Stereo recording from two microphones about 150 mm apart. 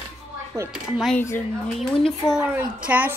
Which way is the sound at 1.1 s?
15° left (ahead or behind).